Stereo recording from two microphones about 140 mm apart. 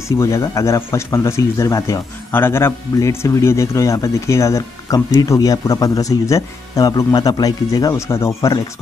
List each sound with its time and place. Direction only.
0.2 s speech: 20° left (ahead or behind)